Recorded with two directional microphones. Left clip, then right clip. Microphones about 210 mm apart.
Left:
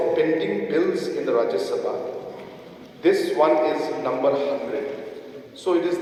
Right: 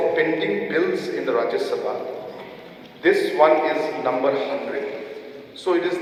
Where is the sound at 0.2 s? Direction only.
55° left (ahead or behind).